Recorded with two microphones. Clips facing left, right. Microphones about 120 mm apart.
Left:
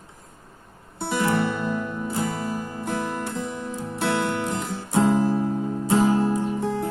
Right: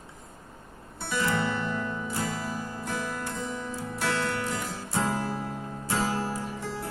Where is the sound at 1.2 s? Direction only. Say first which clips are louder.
Left 5 dB; 15° left (ahead or behind).